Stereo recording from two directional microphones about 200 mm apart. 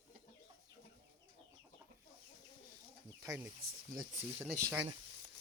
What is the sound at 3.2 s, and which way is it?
Speech, 15° right (ahead or behind).